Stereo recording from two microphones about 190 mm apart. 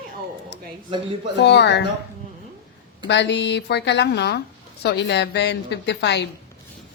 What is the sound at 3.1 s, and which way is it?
A woman's voice, 65° left (ahead or behind).